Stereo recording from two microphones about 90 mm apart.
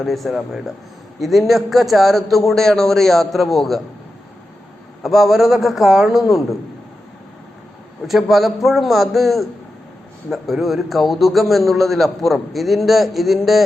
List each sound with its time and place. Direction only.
0.0 s a man's voice: centre (ahead or behind)
5.0 s a man's voice: centre (ahead or behind)
8.0 s a man's voice: centre (ahead or behind)